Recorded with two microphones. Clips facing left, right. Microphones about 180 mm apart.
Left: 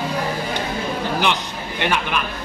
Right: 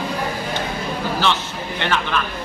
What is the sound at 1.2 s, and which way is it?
A man's voice, 15° left (ahead or behind).